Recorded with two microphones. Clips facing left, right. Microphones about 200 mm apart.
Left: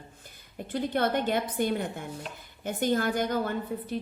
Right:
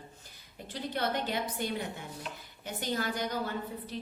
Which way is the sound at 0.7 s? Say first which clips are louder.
Left 6 dB; 55° left (ahead or behind).